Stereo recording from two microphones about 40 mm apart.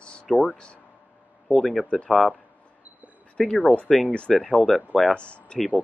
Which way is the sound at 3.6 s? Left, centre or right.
Left.